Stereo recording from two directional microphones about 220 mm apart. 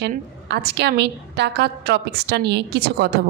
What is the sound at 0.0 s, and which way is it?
A woman's voice, 50° right (ahead or behind).